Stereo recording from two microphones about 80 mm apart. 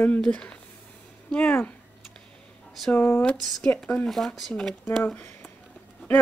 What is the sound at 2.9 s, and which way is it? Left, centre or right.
Speech, left.